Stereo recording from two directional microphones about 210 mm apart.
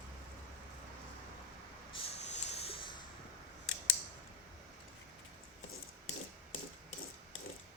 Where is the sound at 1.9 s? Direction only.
25° left (ahead or behind).